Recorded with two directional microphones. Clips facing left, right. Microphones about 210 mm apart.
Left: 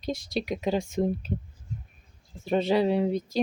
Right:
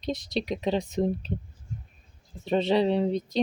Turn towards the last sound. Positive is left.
turn(degrees=5)  # may be behind; listen again after turning